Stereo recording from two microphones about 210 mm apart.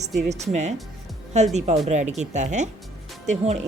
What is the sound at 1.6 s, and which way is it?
Speech, 30° right (ahead or behind).